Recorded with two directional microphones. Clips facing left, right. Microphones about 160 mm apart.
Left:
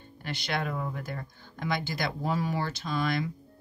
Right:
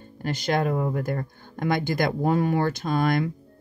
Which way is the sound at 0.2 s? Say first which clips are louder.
Right 8 dB; 45° right (ahead or behind).